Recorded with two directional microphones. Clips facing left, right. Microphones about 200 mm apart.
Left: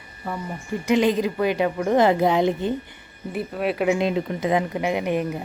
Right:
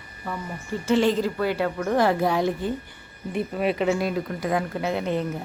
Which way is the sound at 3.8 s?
20° left (ahead or behind).